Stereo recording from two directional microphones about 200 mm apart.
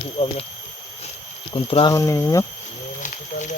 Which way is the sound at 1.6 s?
30° left (ahead or behind).